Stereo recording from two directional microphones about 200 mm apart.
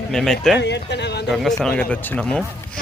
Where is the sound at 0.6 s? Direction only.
60° left (ahead or behind).